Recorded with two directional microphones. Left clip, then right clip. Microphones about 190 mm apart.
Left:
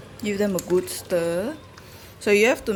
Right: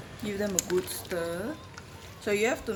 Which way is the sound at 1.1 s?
45° left (ahead or behind).